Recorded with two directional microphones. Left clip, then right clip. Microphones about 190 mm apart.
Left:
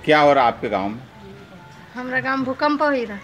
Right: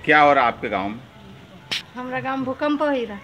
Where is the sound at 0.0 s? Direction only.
20° left (ahead or behind).